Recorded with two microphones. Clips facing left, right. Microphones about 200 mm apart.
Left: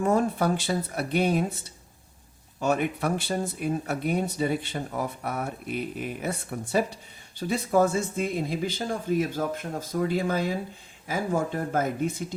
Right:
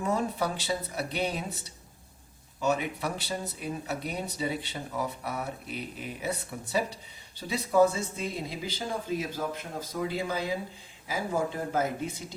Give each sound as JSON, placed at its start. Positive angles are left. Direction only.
{"t": 0.0, "sound": "speech", "side_deg": 50}
{"t": 2.6, "sound": "speech", "side_deg": 55}